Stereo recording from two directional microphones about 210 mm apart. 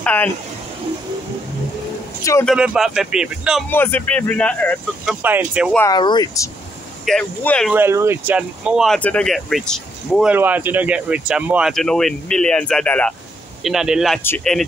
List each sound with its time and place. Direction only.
0.0 s speech: 10° left (ahead or behind)
2.4 s speech: 5° right (ahead or behind)
3.7 s speech: 10° left (ahead or behind)
5.2 s speech: 10° right (ahead or behind)
5.8 s speech: 20° left (ahead or behind)
7.1 s speech: 5° left (ahead or behind)
7.7 s speech: 10° right (ahead or behind); by 14.6 s 5° left (ahead or behind)